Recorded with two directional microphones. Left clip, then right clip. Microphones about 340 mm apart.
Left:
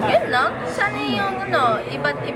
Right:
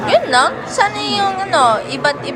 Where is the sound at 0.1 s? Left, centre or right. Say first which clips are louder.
Right 9 dB; centre.